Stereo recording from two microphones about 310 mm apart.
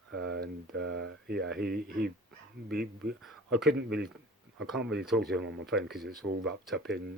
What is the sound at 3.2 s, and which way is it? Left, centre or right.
Speech, centre.